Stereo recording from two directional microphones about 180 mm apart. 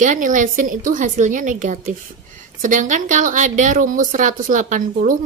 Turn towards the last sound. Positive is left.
turn(degrees=-45)  # may be behind; listen again after turning